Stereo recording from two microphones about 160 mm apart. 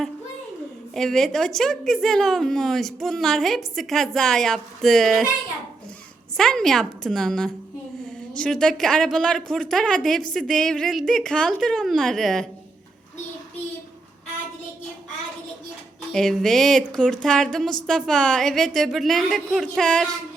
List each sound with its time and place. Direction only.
0.9 s a woman's voice: 5° left (ahead or behind)
6.3 s a woman's voice: 5° left (ahead or behind)
16.1 s a woman's voice: 5° left (ahead or behind)